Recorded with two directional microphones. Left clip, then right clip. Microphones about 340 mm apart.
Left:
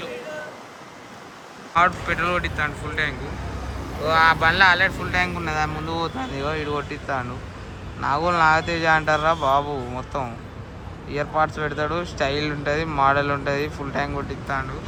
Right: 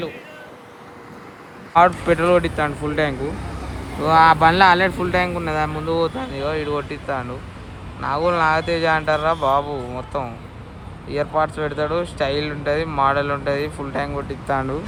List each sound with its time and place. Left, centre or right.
1.7 s speech: centre